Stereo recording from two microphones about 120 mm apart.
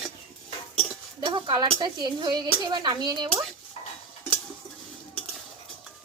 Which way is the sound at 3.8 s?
50° left (ahead or behind).